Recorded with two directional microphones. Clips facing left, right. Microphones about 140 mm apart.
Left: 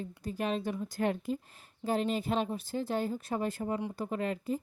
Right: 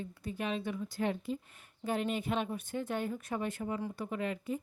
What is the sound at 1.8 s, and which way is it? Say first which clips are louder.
Speech: left 3 dB; 35° left (ahead or behind).